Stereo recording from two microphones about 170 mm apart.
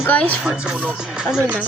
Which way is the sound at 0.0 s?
10° left (ahead or behind).